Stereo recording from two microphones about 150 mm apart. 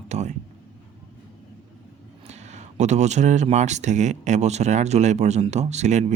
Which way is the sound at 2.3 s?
50° right (ahead or behind).